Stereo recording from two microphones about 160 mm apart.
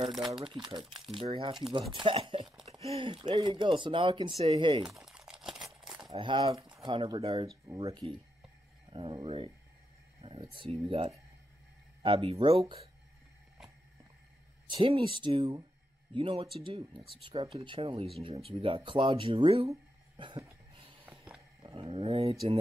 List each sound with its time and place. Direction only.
0.2 s speech: 30° right (ahead or behind)
4.8 s crumpling: 5° right (ahead or behind)
6.1 s speech: 35° right (ahead or behind)
7.6 s speech: 25° right (ahead or behind)
14.7 s speech: 35° right (ahead or behind)
20.2 s cough: 30° right (ahead or behind)
20.7 s a sound: 35° right (ahead or behind)
21.7 s speech: 35° right (ahead or behind)